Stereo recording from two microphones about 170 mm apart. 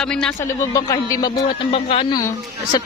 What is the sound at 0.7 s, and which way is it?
Speech, 20° left (ahead or behind).